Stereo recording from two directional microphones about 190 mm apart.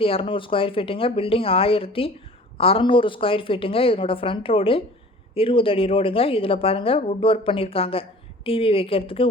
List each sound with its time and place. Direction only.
0.0 s a woman's voice: 30° left (ahead or behind)